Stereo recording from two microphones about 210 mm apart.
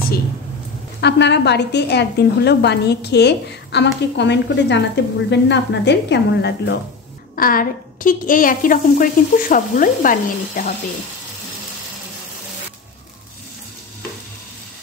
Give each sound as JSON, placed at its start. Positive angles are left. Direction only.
{"t": 1.0, "sound": "a woman's voice", "side_deg": 55}
{"t": 7.3, "sound": "speech", "side_deg": 45}